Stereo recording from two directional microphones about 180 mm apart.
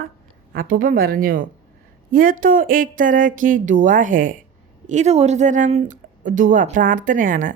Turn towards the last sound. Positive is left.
turn(degrees=-50)  # may be behind; listen again after turning